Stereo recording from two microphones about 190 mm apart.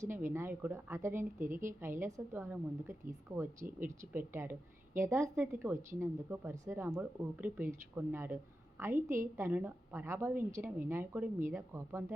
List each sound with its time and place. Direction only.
0.1 s speech: 10° right (ahead or behind)
1.4 s speech: 45° right (ahead or behind)
1.6 s speech: 15° right (ahead or behind)